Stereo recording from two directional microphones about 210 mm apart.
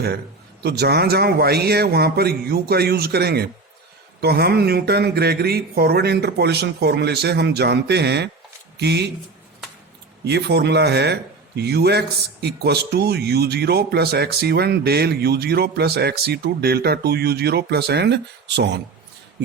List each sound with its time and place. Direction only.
0.6 s speech: 50° right (ahead or behind)
10.2 s speech: 50° right (ahead or behind)